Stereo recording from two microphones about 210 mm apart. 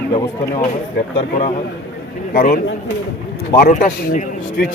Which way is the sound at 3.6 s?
40° left (ahead or behind).